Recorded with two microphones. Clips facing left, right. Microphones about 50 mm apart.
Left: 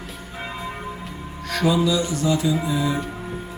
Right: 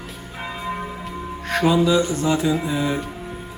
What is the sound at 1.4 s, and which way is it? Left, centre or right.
Music, right.